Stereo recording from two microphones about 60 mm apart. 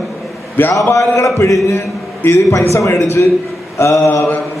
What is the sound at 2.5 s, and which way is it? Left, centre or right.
A man's voice, left.